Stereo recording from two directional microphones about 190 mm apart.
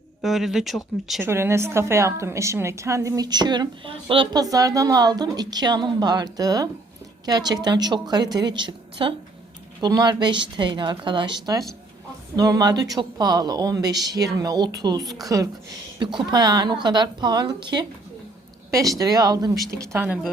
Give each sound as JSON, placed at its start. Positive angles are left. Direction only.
{"t": 0.2, "sound": "speech", "side_deg": 0}
{"t": 1.2, "sound": "a woman's voice", "side_deg": -15}
{"t": 18.9, "sound": "a woman's voice", "side_deg": -20}